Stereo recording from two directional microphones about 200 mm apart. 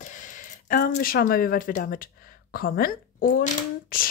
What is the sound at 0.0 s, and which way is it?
Speech, 40° left (ahead or behind).